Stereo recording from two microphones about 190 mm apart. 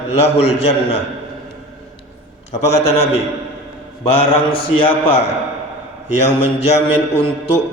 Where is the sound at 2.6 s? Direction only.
35° left (ahead or behind).